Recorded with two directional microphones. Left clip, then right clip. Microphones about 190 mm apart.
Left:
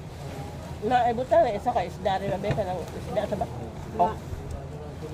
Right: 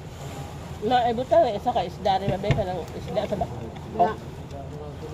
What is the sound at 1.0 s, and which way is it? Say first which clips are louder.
Speech: right 1 dB; 5° right (ahead or behind).